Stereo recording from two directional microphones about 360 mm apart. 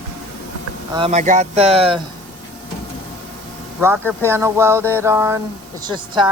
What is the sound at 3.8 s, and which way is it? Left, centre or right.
Speech, centre.